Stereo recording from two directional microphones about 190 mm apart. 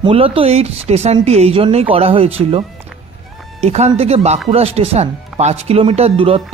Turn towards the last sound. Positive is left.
turn(degrees=-30)  # may be behind; listen again after turning